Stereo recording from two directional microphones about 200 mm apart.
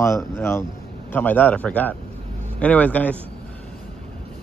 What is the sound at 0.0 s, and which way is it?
Speech, 15° left (ahead or behind).